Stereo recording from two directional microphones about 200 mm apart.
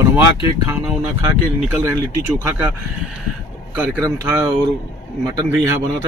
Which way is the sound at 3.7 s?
10° right (ahead or behind).